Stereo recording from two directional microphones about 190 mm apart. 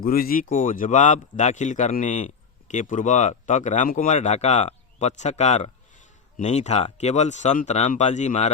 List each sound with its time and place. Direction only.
0.0 s a man's voice: 50° left (ahead or behind)